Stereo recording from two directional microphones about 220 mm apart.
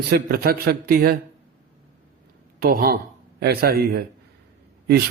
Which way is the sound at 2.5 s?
45° right (ahead or behind).